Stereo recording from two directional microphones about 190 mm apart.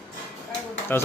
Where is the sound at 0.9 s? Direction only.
10° left (ahead or behind).